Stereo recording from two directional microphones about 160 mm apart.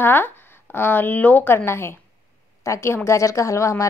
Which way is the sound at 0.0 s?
15° left (ahead or behind).